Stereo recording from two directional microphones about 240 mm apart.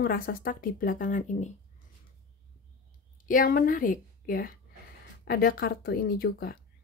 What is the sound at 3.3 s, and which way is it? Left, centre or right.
Speech, left.